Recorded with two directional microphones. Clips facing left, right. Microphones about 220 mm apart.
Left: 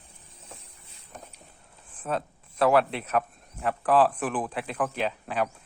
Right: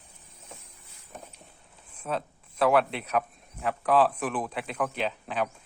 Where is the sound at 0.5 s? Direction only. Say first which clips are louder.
Even; 30° left (ahead or behind).